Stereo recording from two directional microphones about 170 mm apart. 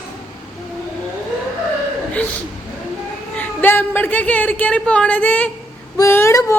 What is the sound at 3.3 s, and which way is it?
Speech, 10° left (ahead or behind).